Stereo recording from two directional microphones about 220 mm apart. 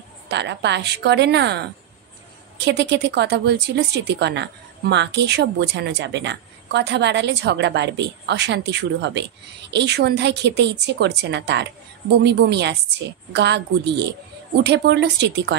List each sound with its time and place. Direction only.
0.3 s speech: 50° right (ahead or behind)